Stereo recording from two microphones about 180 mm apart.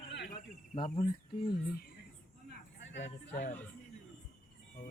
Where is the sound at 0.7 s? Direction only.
25° left (ahead or behind).